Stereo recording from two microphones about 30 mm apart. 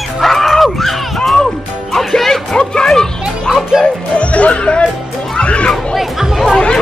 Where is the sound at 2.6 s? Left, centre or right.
Left.